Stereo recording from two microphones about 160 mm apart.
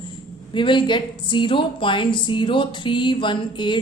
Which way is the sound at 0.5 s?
30° left (ahead or behind).